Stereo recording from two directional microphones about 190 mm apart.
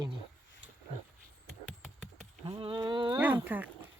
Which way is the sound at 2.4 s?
30° right (ahead or behind).